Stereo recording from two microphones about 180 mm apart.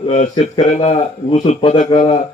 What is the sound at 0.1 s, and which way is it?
A man's voice, 40° left (ahead or behind).